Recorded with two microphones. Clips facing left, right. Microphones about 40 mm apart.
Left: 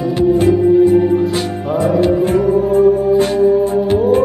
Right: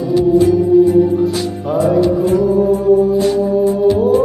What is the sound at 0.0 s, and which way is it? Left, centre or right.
Music, left.